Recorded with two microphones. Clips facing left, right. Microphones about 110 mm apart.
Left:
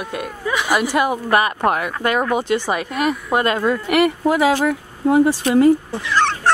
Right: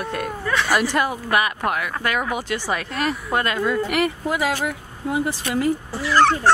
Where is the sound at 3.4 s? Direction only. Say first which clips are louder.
Left 4 dB; 40° left (ahead or behind).